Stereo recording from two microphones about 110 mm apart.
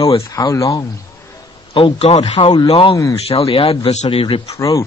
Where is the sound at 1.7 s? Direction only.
50° left (ahead or behind); by 2.3 s 70° left (ahead or behind).